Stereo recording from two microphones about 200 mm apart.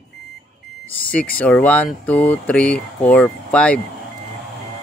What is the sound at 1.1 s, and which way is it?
Speech, 5° left (ahead or behind).